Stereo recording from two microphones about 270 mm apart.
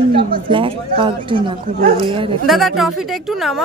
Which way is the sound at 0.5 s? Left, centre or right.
Centre.